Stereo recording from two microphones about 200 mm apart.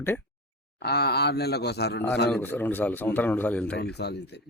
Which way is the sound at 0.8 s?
55° left (ahead or behind).